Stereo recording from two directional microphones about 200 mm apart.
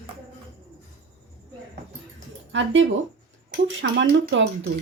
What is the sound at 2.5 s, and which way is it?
Speech, 70° right (ahead or behind).